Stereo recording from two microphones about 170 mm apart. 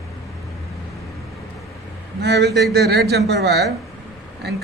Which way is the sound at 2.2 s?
75° right (ahead or behind).